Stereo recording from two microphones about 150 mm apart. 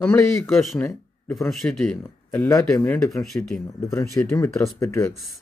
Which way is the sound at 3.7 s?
20° left (ahead or behind).